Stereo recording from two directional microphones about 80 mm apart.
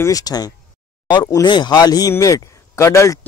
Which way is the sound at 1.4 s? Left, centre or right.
Left.